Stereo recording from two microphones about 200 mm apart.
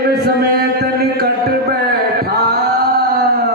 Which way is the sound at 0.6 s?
50° right (ahead or behind).